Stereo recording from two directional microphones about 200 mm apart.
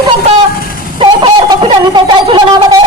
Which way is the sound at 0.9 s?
25° right (ahead or behind).